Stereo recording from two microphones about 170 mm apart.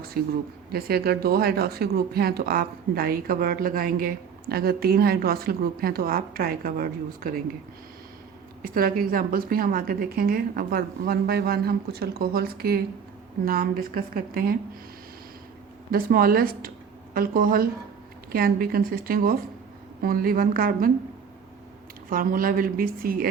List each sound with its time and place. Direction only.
0.1 s speech: 60° right (ahead or behind)
8.7 s speech: 60° right (ahead or behind)
15.9 s speech: 60° right (ahead or behind)
22.1 s speech: 55° right (ahead or behind)